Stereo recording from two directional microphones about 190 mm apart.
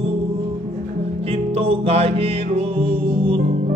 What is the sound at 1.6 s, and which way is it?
Music, 30° right (ahead or behind).